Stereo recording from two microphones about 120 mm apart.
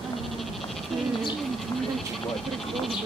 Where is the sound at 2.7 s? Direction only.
Centre (ahead or behind).